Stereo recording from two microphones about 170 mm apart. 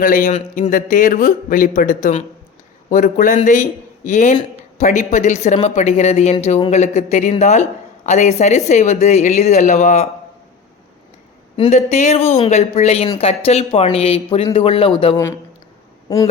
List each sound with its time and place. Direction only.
0.0 s a man's voice: 50° left (ahead or behind)
0.3 s speech: 35° left (ahead or behind)
0.7 s a man's voice: 50° left (ahead or behind)
11.5 s speech: 35° left (ahead or behind); by 15.4 s 20° left (ahead or behind)